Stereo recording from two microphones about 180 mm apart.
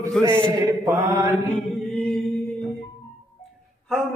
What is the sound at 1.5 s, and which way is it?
Chant, 5° left (ahead or behind).